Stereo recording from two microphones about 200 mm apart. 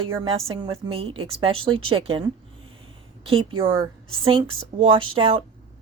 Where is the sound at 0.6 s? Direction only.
30° right (ahead or behind).